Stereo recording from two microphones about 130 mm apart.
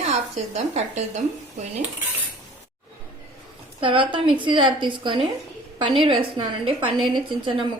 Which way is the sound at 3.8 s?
40° right (ahead or behind).